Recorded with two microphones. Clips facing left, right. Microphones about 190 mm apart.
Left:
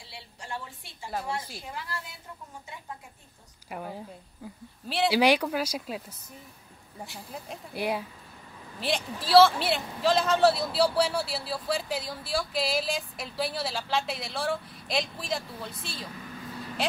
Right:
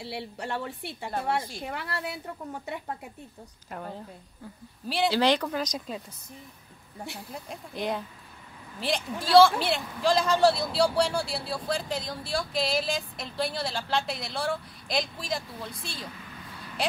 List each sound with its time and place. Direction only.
0.0 s a woman's voice: 65° right (ahead or behind)
3.7 s a man's voice: 10° left (ahead or behind)
5.1 s speech: 10° left (ahead or behind)
7.2 s a man's voice: 5° left (ahead or behind)